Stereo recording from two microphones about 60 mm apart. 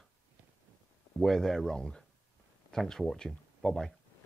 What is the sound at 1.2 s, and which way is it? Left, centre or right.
Speech, centre.